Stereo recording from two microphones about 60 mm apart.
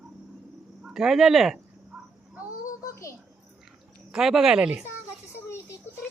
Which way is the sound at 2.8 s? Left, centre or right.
Left.